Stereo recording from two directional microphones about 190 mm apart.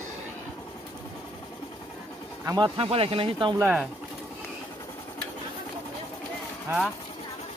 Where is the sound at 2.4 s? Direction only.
20° right (ahead or behind).